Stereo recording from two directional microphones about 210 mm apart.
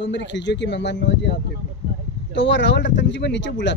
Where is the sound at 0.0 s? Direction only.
55° left (ahead or behind).